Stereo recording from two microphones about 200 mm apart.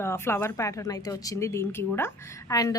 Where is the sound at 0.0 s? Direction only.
10° left (ahead or behind).